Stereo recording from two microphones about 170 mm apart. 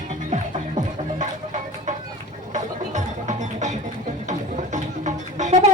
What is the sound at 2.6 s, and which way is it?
Music, 45° right (ahead or behind).